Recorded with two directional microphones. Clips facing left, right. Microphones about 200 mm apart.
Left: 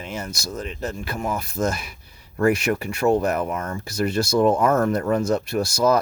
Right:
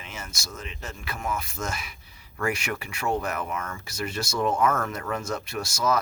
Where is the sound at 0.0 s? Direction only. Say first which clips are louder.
Left 9 dB; 35° left (ahead or behind).